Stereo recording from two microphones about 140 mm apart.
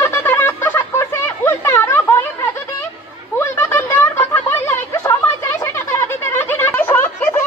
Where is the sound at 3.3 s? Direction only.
15° left (ahead or behind).